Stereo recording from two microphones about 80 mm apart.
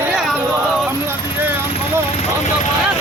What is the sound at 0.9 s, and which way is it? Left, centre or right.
Vehicle, right.